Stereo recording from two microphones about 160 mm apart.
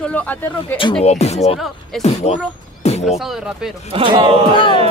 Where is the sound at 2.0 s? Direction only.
40° left (ahead or behind).